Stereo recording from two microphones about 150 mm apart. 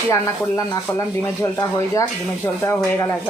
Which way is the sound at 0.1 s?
20° left (ahead or behind).